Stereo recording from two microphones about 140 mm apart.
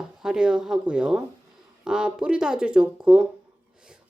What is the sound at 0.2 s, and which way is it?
Speech, 5° right (ahead or behind).